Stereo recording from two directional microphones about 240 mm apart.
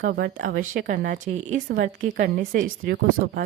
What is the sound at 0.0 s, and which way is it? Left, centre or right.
Speech, right.